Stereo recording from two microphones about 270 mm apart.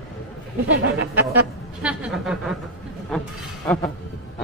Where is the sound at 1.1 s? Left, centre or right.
Centre.